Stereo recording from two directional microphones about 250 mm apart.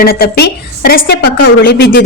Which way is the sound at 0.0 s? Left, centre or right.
Left.